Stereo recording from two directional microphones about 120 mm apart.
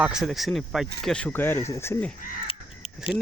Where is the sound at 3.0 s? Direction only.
50° left (ahead or behind).